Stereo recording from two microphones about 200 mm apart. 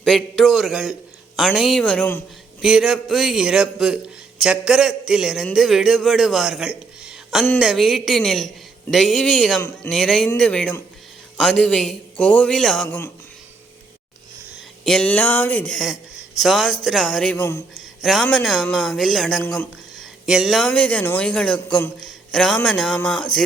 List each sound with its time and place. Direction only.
0.0 s a man's voice: centre (ahead or behind)
9.6 s speech: 15° left (ahead or behind)
9.9 s a man's voice: centre (ahead or behind)
14.8 s a man's voice: 5° left (ahead or behind)